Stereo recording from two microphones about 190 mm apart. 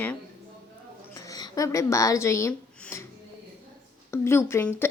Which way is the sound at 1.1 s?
20° left (ahead or behind).